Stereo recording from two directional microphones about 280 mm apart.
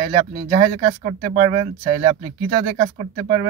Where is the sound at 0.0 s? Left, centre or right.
Right.